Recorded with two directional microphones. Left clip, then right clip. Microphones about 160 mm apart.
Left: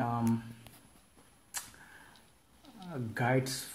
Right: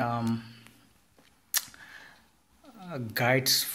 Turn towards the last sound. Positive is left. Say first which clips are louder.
# right 7 dB
turn(degrees=-15)  # may be behind; listen again after turning